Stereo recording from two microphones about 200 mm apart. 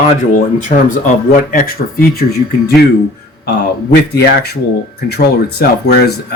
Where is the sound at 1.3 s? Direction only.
45° left (ahead or behind).